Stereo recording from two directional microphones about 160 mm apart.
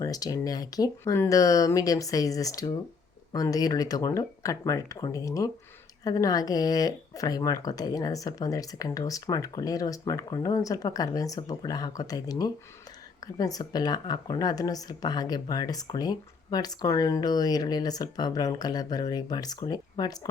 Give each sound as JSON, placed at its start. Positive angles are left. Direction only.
{"t": 0.0, "sound": "speech", "side_deg": 25}